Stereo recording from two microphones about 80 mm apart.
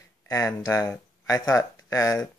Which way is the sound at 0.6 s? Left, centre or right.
Left.